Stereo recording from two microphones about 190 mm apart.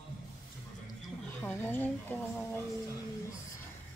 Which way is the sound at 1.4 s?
10° left (ahead or behind).